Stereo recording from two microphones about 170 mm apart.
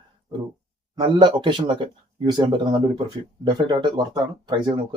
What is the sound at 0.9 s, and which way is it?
Speech, 25° right (ahead or behind).